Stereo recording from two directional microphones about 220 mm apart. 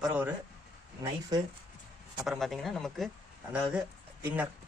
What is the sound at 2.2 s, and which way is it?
Speech, centre (ahead or behind).